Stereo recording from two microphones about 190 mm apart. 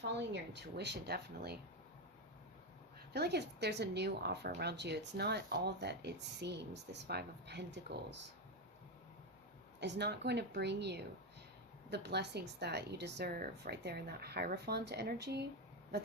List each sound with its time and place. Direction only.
0.0 s a woman's voice: 65° right (ahead or behind)
3.1 s a woman's voice: 60° right (ahead or behind)
9.8 s a woman's voice: 65° right (ahead or behind)